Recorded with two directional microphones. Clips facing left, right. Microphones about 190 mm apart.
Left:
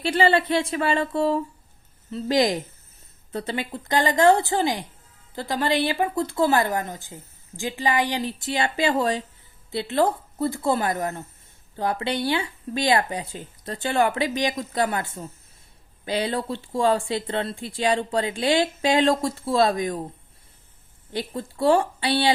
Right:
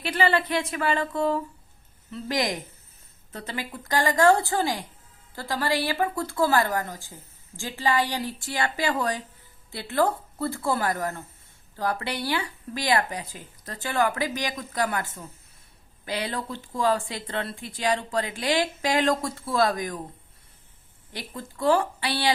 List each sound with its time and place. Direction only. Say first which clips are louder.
0.0 s speech: left 4 dB; 30° left (ahead or behind)
16.0 s speech: left 5 dB; 25° left (ahead or behind)
21.1 s speech: left 8 dB; 25° left (ahead or behind)